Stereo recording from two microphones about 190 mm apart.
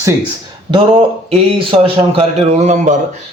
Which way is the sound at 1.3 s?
30° right (ahead or behind).